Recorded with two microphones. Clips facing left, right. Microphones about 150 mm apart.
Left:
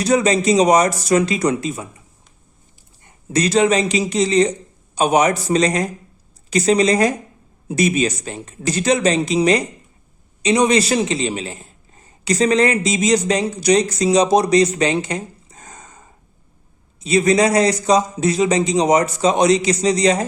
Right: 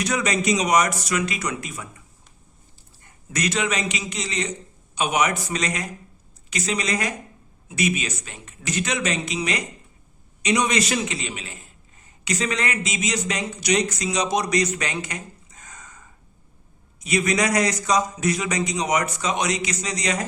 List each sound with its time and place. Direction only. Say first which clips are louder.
0.0 s a man's voice: left 8 dB; 30° left (ahead or behind)
3.0 s a man's voice: left 8 dB; 25° left (ahead or behind)